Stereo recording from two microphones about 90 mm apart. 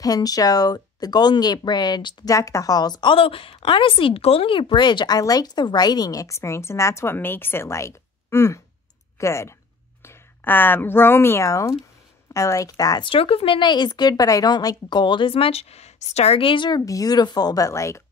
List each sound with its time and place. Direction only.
0.0 s a woman's voice: 45° left (ahead or behind)
2.3 s a woman's voice: 35° left (ahead or behind)
13.0 s speech: 85° left
16.3 s speech: 80° left
16.8 s speech: 40° left (ahead or behind)